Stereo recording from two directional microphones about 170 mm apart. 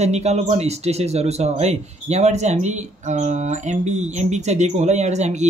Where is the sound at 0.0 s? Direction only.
40° right (ahead or behind).